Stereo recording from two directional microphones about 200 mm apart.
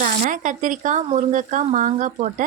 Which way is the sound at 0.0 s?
40° right (ahead or behind).